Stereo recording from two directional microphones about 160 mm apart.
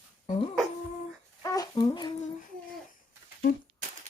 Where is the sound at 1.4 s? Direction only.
20° left (ahead or behind).